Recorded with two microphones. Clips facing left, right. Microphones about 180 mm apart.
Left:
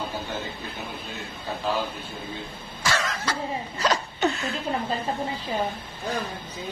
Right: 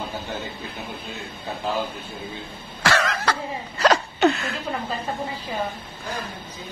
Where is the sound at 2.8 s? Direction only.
65° right (ahead or behind).